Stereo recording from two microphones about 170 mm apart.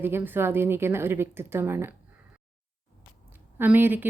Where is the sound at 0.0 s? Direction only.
10° right (ahead or behind).